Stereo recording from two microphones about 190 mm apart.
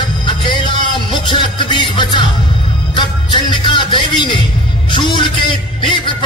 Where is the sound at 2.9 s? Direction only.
25° left (ahead or behind).